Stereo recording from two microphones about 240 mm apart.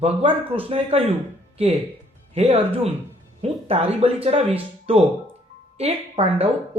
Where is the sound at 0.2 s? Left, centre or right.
Right.